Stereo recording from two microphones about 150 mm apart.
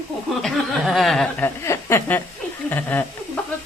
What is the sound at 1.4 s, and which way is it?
Speech, 20° left (ahead or behind).